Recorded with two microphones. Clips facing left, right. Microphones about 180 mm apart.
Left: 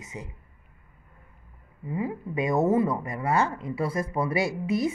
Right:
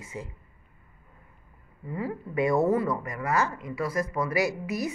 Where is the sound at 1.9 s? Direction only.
20° left (ahead or behind).